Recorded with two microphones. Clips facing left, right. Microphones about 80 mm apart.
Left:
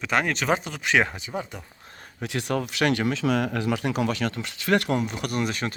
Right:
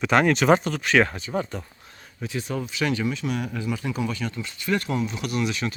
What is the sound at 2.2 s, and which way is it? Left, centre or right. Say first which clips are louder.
Speech: left 2 dB; left.